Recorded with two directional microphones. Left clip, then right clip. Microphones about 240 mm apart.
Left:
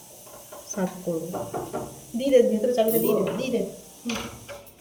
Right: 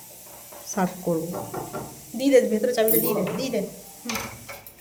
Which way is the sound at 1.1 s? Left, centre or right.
Right.